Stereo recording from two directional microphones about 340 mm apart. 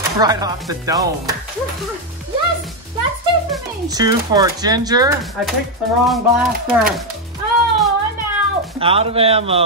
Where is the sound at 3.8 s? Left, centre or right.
Centre.